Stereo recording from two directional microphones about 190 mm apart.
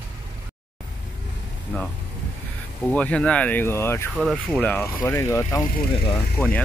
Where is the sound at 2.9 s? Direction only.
5° left (ahead or behind).